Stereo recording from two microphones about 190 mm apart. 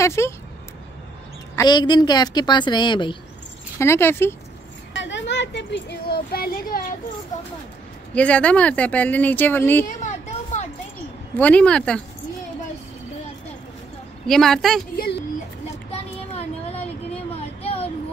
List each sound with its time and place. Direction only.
0.0 s speech: 15° left (ahead or behind)
1.5 s a woman's voice: 20° left (ahead or behind)
3.7 s speech: 15° left (ahead or behind)
4.9 s a child's voice: 70° left (ahead or behind); by 6.8 s 55° left (ahead or behind)
8.1 s speech: 5° left (ahead or behind)
9.8 s a sound: 40° left (ahead or behind)
11.3 s speech: 10° left (ahead or behind)
14.2 s speech: centre (ahead or behind)
15.9 s a sound: 30° left (ahead or behind)